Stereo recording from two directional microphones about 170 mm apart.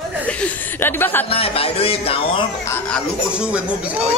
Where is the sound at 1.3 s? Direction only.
35° left (ahead or behind).